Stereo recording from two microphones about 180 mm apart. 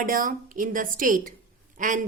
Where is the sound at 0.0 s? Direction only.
50° right (ahead or behind).